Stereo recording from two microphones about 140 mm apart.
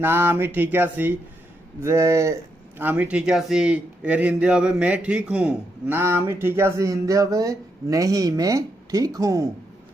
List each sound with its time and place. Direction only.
0.0 s speech: 15° right (ahead or behind)